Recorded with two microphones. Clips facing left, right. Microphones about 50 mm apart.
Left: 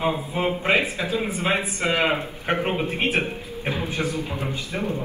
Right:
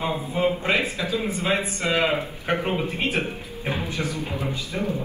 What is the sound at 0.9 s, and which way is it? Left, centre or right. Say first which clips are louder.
A man's voice: left 1 dB; left.